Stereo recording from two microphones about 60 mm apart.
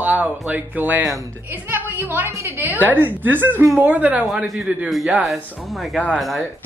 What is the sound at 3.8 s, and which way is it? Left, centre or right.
Speech, right.